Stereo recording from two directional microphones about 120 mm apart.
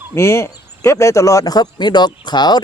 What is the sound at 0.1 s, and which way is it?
Speech, 20° left (ahead or behind).